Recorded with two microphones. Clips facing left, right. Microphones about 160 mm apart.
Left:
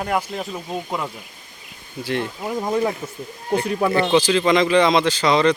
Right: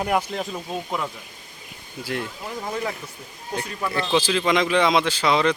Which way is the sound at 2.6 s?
20° left (ahead or behind).